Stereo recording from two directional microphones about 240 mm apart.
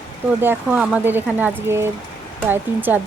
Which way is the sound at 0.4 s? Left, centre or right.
Centre.